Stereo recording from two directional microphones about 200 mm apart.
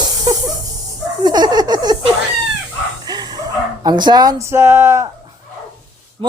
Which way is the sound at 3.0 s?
20° right (ahead or behind).